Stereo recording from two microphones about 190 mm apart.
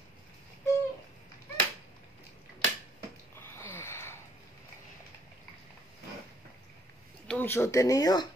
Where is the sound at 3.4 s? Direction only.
10° left (ahead or behind).